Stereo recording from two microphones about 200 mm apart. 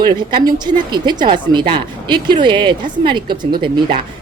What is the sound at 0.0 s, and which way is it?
Speech, 20° right (ahead or behind).